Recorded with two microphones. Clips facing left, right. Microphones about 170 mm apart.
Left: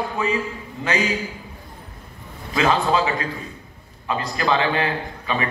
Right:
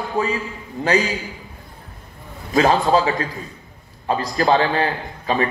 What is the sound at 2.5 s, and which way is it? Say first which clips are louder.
A man's voice: right 4 dB; 40° right (ahead or behind).